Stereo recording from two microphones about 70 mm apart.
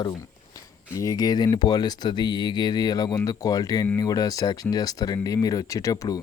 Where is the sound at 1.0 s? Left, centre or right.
Left.